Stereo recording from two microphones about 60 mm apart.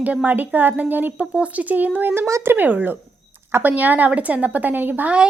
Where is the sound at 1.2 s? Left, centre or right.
Centre.